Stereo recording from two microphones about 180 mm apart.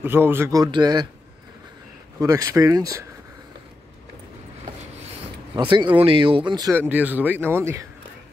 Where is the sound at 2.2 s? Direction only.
20° right (ahead or behind).